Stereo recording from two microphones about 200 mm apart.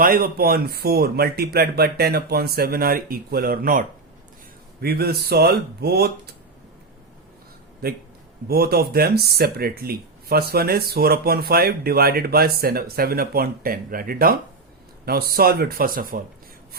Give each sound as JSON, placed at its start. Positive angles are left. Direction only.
{"t": 0.0, "sound": "speech", "side_deg": -50}
{"t": 7.8, "sound": "speech", "side_deg": -50}